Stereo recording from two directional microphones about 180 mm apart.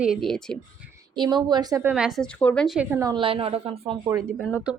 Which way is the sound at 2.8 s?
10° right (ahead or behind).